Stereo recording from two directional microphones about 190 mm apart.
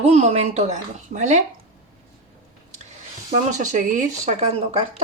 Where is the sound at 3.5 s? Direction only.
40° right (ahead or behind).